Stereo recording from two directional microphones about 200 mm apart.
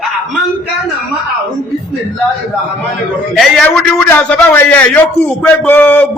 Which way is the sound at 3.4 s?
5° left (ahead or behind).